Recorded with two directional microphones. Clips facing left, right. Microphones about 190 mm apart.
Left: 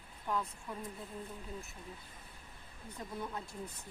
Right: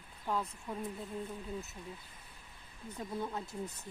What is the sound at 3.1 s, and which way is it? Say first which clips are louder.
Speech: right 3 dB; 20° right (ahead or behind).